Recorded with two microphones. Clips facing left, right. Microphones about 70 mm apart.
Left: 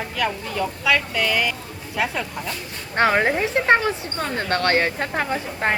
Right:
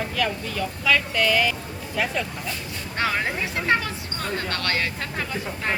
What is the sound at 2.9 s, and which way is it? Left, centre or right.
Speech, left.